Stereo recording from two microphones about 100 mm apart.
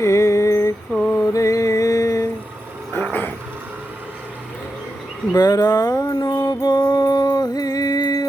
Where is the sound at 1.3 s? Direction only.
35° left (ahead or behind).